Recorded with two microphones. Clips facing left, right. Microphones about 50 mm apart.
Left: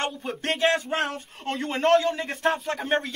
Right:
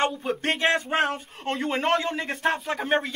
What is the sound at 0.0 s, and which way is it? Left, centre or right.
Speech, centre.